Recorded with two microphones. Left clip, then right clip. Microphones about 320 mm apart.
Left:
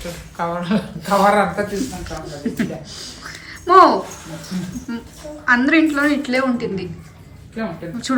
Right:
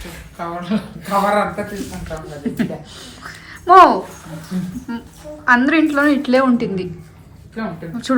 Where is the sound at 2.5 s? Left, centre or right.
Centre.